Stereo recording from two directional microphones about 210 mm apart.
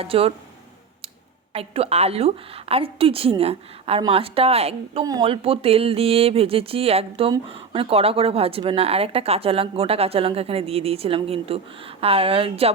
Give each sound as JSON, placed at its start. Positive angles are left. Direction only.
{"t": 0.0, "sound": "speech", "side_deg": -25}
{"t": 1.5, "sound": "speech", "side_deg": -30}